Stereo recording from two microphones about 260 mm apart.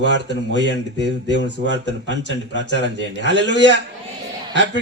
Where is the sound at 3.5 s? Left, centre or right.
Left.